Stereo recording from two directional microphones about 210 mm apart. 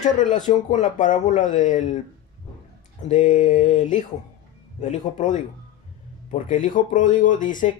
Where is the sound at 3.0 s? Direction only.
35° left (ahead or behind).